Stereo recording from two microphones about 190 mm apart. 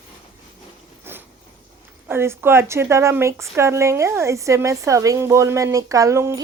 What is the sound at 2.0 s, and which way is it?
Speech, 10° right (ahead or behind).